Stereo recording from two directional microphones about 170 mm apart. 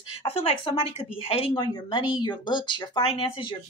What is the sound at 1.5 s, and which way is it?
A woman's voice, 25° left (ahead or behind).